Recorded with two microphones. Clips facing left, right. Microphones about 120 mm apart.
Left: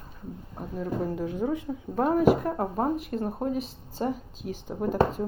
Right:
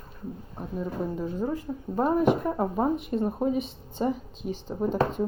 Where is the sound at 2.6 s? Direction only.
Centre (ahead or behind).